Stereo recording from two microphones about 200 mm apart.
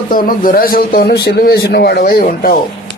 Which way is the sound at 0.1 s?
45° left (ahead or behind).